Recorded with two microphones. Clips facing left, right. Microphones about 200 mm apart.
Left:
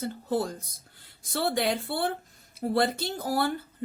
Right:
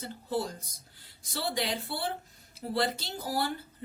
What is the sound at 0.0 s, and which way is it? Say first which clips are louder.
Speech: left 4 dB; 50° left (ahead or behind).